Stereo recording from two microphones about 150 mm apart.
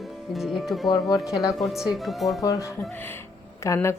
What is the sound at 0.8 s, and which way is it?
Speech, 25° left (ahead or behind).